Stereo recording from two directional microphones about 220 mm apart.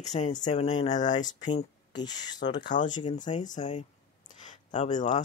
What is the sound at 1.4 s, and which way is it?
Speech, 20° left (ahead or behind).